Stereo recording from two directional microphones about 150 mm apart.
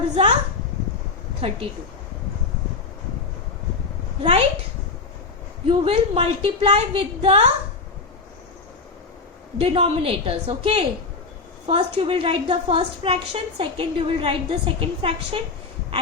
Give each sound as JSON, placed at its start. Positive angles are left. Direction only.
{"t": 1.4, "sound": "a woman's voice", "side_deg": -40}
{"t": 4.2, "sound": "a woman's voice", "side_deg": -40}
{"t": 5.6, "sound": "a woman's voice", "side_deg": -40}
{"t": 9.6, "sound": "a woman's voice", "side_deg": -40}